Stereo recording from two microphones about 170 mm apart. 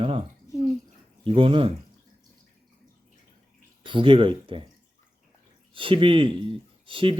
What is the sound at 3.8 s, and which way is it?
Speech, 30° right (ahead or behind).